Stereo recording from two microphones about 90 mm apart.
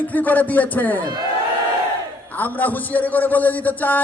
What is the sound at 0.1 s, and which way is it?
Speech, 20° left (ahead or behind).